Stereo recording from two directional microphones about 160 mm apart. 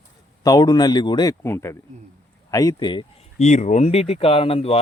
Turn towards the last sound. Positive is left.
turn(degrees=40)  # may be behind; listen again after turning